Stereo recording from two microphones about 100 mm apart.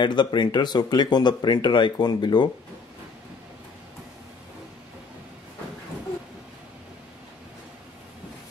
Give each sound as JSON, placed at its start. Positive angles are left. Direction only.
{"t": 0.0, "sound": "speech", "side_deg": 50}